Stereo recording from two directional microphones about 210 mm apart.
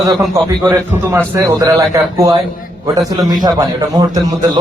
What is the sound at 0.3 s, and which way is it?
A man's voice, 15° right (ahead or behind).